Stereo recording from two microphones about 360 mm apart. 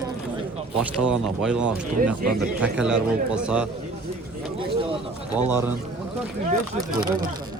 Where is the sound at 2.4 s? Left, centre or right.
Centre.